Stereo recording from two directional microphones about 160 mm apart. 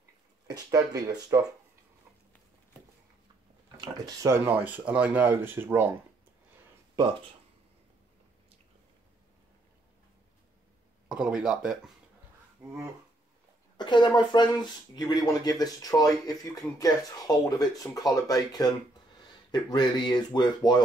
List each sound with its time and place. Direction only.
0.5 s speech: 25° right (ahead or behind)
3.7 s speech: 20° right (ahead or behind)
11.1 s speech: 5° right (ahead or behind)
13.7 s speech: 30° left (ahead or behind)